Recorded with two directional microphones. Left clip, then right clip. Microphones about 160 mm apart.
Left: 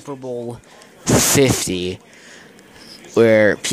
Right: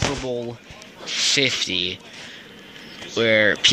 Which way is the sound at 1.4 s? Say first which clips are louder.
Left 3 dB; 60° left (ahead or behind).